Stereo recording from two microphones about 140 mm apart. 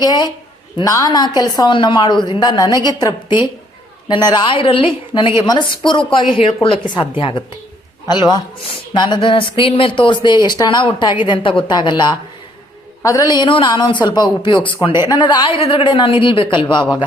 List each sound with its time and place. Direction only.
0.0 s a man's voice: 30° left (ahead or behind)
13.0 s speech: 25° left (ahead or behind)